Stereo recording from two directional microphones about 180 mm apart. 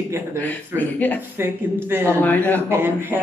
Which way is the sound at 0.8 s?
10° left (ahead or behind).